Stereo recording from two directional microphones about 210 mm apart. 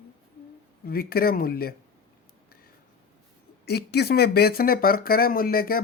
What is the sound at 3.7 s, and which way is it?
Speech, 50° left (ahead or behind).